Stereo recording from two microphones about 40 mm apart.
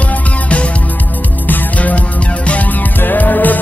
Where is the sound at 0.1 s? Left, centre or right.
Left.